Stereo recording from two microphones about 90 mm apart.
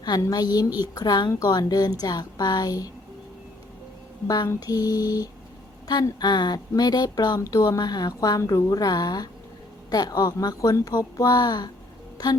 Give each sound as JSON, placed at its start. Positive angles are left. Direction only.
{"t": 0.2, "sound": "speech", "side_deg": 45}
{"t": 4.4, "sound": "speech", "side_deg": 45}
{"t": 12.1, "sound": "music", "side_deg": 45}